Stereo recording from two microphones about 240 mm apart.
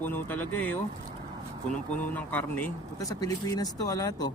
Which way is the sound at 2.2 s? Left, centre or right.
Centre.